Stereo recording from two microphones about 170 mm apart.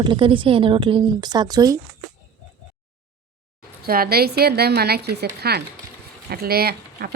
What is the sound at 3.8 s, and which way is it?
Speech, 60° right (ahead or behind).